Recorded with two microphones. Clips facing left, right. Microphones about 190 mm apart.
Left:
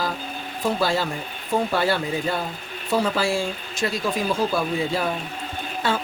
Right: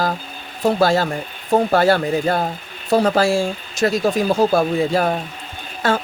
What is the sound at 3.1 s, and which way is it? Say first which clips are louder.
Speech: right 6 dB; 45° right (ahead or behind).